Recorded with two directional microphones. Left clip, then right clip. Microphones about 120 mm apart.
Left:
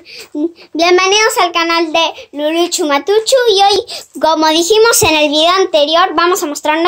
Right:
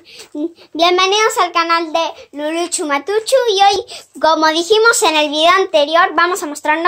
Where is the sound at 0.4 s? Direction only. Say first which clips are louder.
Left 1 dB; 10° left (ahead or behind).